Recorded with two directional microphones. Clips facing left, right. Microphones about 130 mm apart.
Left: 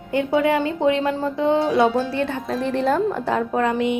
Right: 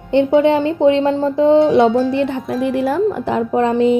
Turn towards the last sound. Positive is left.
turn(degrees=-30)  # may be behind; listen again after turning